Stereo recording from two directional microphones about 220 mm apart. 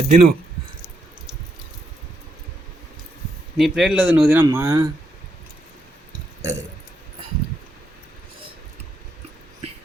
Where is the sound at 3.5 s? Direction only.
Centre (ahead or behind).